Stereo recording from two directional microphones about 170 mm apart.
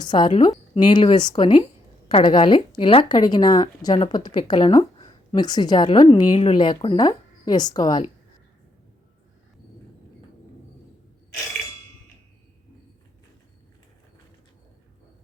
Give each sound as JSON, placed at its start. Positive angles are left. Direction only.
{"t": 0.0, "sound": "speech", "side_deg": 25}